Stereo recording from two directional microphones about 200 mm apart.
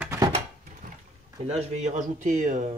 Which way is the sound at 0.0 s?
15° right (ahead or behind).